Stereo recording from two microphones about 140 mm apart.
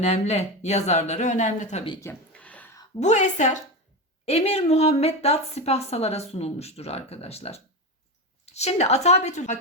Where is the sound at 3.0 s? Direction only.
60° left (ahead or behind).